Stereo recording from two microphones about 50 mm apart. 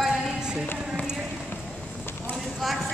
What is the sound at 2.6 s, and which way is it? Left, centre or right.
Speech, centre.